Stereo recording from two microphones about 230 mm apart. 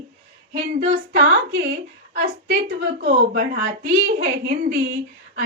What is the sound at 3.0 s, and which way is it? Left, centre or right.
A woman's voice, right.